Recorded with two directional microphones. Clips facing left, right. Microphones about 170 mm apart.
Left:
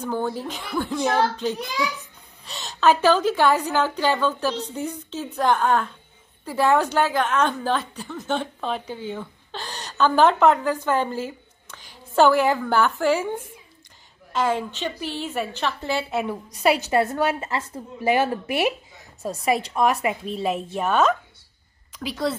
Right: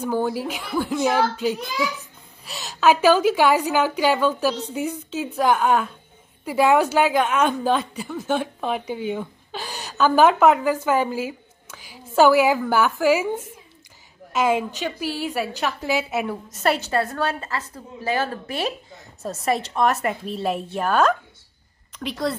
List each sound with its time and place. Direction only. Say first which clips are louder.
0.0 s a woman's voice: right 3 dB; 10° right (ahead or behind)
16.9 s a woman's voice: left 2 dB; 20° left (ahead or behind)
19.2 s a woman's voice: left 1 dB; centre (ahead or behind)